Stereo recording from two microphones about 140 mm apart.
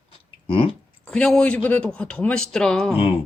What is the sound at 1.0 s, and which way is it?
A man's voice, 5° left (ahead or behind).